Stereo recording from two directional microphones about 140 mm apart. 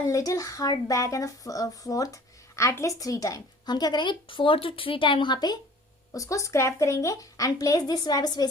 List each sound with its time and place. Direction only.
0.1 s a woman's voice: 25° left (ahead or behind)